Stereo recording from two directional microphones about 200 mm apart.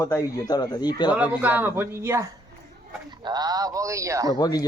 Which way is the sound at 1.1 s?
10° right (ahead or behind).